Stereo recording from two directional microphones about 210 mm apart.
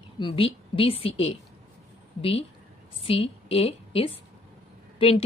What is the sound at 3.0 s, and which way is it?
A woman's voice, 25° left (ahead or behind).